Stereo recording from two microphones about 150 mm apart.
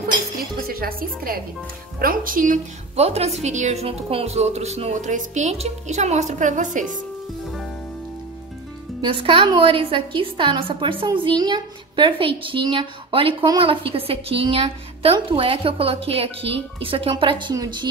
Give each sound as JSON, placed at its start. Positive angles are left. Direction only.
{"t": 0.7, "sound": "speech", "side_deg": -80}
{"t": 3.0, "sound": "a woman's voice", "side_deg": -45}
{"t": 9.0, "sound": "a woman's voice", "side_deg": -35}